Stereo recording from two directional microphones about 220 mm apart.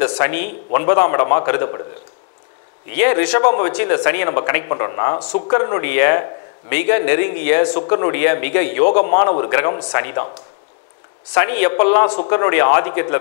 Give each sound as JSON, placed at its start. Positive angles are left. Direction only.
{"t": 0.0, "sound": "speech", "side_deg": 20}
{"t": 2.9, "sound": "a man's voice", "side_deg": 15}
{"t": 11.3, "sound": "a man's voice", "side_deg": 15}